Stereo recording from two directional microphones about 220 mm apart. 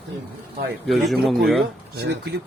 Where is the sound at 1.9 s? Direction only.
50° right (ahead or behind).